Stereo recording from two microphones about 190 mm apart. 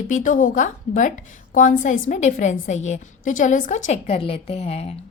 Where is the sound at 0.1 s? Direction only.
45° left (ahead or behind).